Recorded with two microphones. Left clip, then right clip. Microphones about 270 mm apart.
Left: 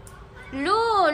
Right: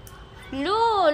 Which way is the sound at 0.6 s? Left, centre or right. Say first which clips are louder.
Left 1 dB; right.